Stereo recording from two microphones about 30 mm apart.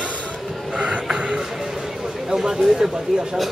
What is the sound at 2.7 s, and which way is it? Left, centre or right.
Speech, right.